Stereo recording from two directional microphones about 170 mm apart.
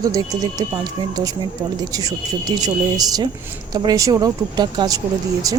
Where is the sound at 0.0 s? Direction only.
20° right (ahead or behind).